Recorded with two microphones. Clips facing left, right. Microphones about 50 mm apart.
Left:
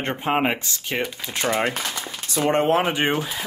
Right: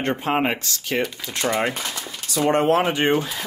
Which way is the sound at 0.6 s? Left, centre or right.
Left.